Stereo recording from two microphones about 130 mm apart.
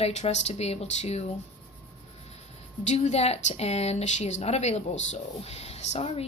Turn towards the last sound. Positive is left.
turn(degrees=50)  # may be behind; listen again after turning